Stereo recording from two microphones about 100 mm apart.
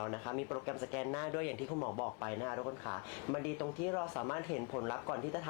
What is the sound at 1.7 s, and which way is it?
Speech, 30° left (ahead or behind).